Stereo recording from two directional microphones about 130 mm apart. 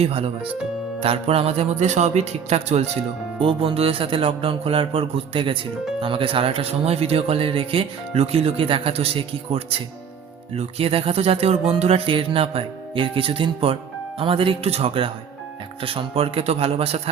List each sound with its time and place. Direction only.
0.0 s speech: 45° right (ahead or behind)
3.4 s speech: 45° right (ahead or behind)